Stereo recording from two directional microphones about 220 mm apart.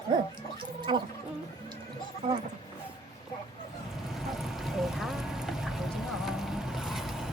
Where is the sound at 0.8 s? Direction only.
20° right (ahead or behind).